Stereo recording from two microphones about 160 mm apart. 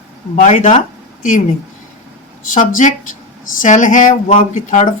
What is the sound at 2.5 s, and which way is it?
Speech, 55° left (ahead or behind).